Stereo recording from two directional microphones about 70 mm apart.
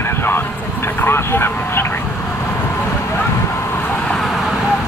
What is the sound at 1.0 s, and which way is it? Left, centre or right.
Vehicle, left.